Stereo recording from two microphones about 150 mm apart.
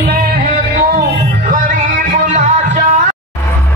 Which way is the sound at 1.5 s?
60° right (ahead or behind).